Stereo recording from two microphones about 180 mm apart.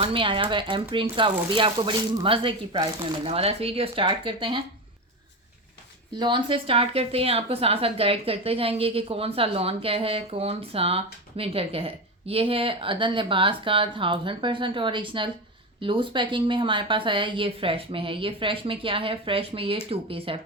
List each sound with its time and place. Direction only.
0.0 s a woman's voice: 30° right (ahead or behind)
6.1 s a woman's voice: 25° right (ahead or behind)